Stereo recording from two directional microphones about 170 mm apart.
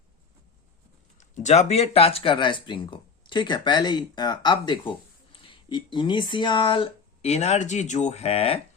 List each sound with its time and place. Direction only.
1.2 s speech: 45° left (ahead or behind)